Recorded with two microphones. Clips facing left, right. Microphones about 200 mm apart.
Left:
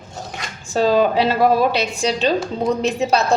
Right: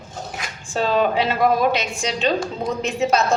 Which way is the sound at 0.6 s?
40° left (ahead or behind).